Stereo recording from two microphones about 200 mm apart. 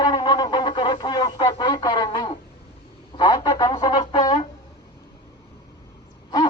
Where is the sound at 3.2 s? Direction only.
20° left (ahead or behind).